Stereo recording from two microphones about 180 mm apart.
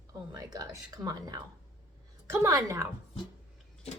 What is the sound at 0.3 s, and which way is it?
A woman's voice, 20° right (ahead or behind).